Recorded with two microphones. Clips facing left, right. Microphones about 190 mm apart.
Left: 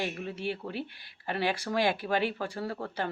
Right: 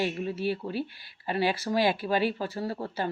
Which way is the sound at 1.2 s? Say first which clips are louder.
Right 3 dB; 55° left (ahead or behind).